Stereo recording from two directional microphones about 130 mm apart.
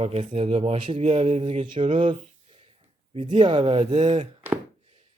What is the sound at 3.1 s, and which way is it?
Speech, 35° right (ahead or behind).